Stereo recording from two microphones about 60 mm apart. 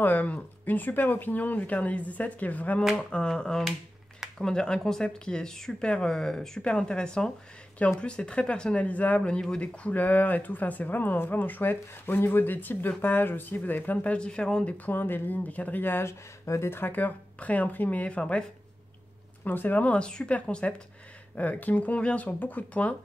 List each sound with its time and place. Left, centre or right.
0.0 s speech: left
14.1 s speech: centre
14.9 s speech: left
16.1 s speech: left
16.7 s speech: left
19.4 s speech: left